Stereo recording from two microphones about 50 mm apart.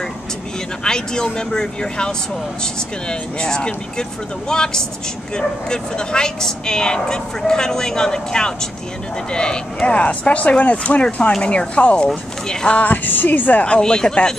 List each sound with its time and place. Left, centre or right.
0.8 s speech: centre
12.7 s speech: left
13.7 s speech: centre